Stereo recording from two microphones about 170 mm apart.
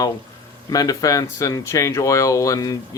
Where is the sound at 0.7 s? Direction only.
20° left (ahead or behind).